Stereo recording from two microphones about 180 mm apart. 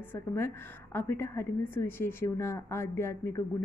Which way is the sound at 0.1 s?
15° left (ahead or behind).